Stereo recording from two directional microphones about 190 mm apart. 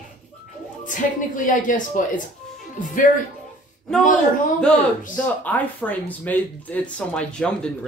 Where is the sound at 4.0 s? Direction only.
40° left (ahead or behind).